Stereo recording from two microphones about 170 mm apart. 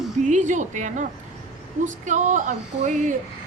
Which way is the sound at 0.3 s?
45° right (ahead or behind).